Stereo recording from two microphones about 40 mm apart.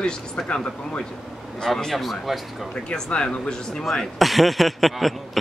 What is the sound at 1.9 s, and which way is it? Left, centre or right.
Speech, centre.